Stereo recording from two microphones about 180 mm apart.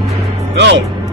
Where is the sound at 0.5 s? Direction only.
80° right.